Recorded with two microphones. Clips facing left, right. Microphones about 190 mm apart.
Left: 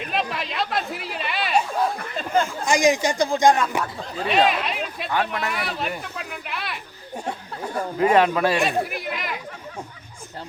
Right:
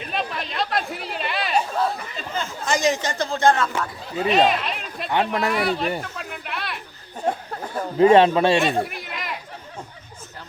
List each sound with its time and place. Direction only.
0.0 s chatter: centre (ahead or behind)
2.1 s a sound: 50° left (ahead or behind)
2.6 s a man's voice: 15° left (ahead or behind)
4.2 s speech: centre (ahead or behind)
5.1 s a man's voice: 30° right (ahead or behind)
5.5 s speech: centre (ahead or behind)
6.0 s a sound: centre (ahead or behind)
7.9 s a man's voice: 25° right (ahead or behind)
8.5 s chatter: centre (ahead or behind)